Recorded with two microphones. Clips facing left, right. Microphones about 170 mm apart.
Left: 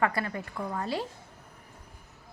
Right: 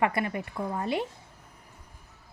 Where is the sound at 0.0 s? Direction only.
20° right (ahead or behind).